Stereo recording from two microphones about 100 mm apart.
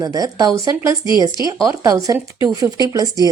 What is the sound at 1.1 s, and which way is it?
Speech, 50° left (ahead or behind).